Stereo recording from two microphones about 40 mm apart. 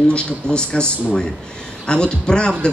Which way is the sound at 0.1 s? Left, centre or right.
Left.